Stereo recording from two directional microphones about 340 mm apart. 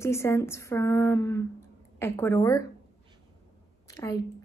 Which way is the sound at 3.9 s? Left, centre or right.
Centre.